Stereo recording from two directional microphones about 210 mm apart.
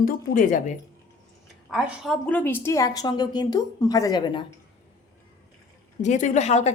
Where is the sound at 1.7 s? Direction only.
Centre (ahead or behind); by 4.4 s 20° left (ahead or behind).